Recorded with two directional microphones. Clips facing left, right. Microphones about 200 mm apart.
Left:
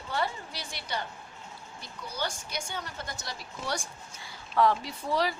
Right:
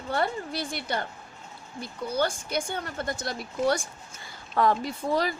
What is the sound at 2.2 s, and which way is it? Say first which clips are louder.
A woman's voice: right 8 dB; 55° right (ahead or behind).